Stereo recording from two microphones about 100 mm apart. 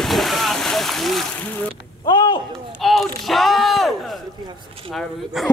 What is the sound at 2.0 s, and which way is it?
Speech, 50° left (ahead or behind).